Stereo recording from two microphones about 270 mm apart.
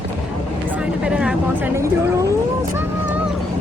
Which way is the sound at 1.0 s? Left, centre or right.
Centre.